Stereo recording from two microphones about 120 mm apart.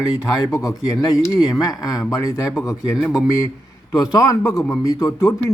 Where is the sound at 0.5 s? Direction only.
25° left (ahead or behind).